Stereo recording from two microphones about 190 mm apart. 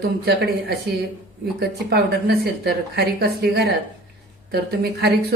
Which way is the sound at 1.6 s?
55° right (ahead or behind).